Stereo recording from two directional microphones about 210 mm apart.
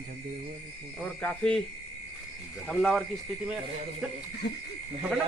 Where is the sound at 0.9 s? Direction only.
5° left (ahead or behind).